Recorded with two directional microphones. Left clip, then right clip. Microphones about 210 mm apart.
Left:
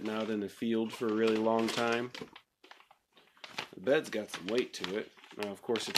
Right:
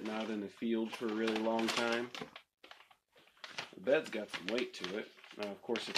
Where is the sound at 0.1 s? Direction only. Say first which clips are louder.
Left 6 dB; 50° left (ahead or behind).